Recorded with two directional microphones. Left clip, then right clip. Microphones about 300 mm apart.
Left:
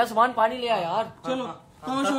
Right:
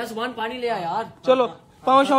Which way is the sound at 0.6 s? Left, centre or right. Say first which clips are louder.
Even; left.